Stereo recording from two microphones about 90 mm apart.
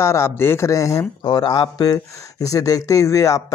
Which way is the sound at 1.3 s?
55° left (ahead or behind).